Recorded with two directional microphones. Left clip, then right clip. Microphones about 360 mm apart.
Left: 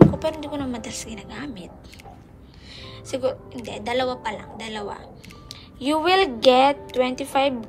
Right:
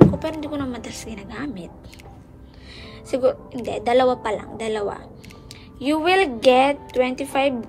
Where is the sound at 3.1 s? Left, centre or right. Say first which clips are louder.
Right 5 dB; centre.